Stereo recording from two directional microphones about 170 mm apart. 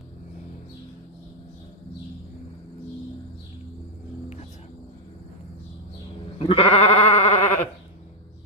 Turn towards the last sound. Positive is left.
turn(degrees=40)  # may be behind; listen again after turning